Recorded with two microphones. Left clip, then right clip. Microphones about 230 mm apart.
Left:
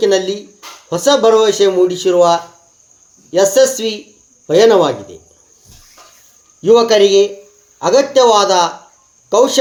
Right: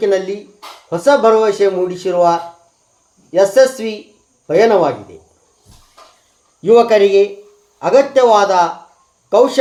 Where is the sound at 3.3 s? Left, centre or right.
Left.